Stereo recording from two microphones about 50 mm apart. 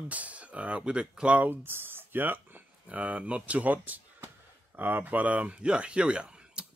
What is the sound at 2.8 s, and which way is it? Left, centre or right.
Speech, right.